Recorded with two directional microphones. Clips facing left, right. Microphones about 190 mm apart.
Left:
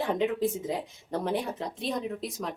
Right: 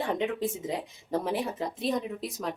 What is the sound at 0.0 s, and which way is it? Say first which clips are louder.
Speech: left 2 dB; centre (ahead or behind).